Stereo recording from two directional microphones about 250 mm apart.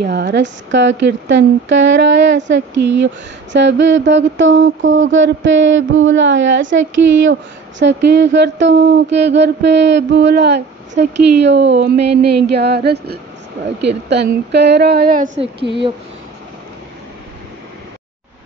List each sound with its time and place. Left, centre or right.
0.0 s speech: right
6.8 s speech: right
7.8 s a woman's voice: right